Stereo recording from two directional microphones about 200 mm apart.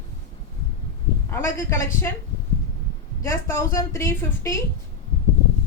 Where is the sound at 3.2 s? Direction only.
15° left (ahead or behind).